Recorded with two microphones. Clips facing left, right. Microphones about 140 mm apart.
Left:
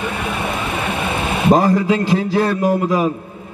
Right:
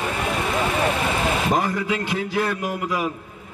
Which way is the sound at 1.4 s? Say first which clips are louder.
Left 9 dB; 35° left (ahead or behind).